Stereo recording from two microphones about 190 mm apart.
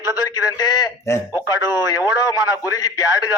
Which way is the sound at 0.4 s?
20° left (ahead or behind).